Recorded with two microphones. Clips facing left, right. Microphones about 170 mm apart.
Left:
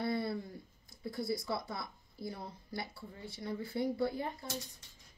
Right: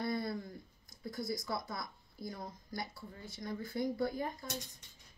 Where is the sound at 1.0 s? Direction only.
30° left (ahead or behind).